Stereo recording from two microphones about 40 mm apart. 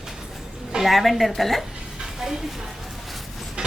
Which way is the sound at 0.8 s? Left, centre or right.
Centre.